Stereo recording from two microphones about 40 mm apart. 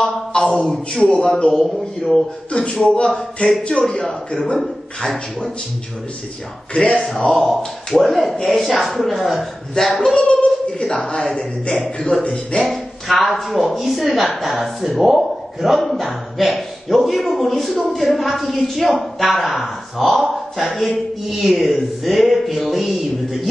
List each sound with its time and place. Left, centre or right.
0.0 s a man's voice: centre
2.5 s a man's voice: left
4.6 s a woman's voice: centre
6.7 s a man's voice: left
7.1 s a woman's voice: centre
10.1 s a sound: left
12.0 s a man's voice: centre
12.6 s a woman's voice: centre